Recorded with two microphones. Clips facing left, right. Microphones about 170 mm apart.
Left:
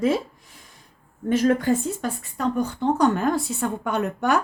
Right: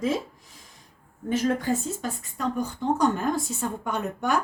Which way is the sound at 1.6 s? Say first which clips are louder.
Left 5 dB; 65° left (ahead or behind).